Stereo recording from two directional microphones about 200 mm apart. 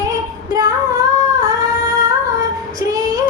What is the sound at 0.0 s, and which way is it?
Child singing, 20° right (ahead or behind).